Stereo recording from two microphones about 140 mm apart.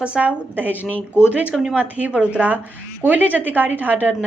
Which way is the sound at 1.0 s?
15° left (ahead or behind).